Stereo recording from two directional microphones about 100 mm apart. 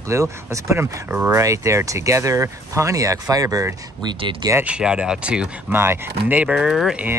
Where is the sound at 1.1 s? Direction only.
20° right (ahead or behind).